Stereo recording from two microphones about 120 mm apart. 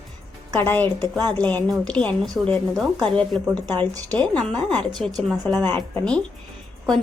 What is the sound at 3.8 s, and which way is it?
Speech, 30° right (ahead or behind).